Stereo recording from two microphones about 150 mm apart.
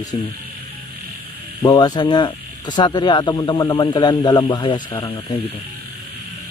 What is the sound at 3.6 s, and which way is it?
Speech, 25° left (ahead or behind).